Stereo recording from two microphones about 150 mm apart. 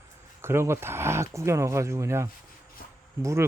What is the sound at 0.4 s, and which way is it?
Speech, 15° right (ahead or behind).